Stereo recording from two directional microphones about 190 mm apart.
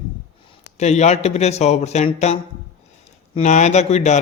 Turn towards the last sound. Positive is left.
turn(degrees=35)  # may be behind; listen again after turning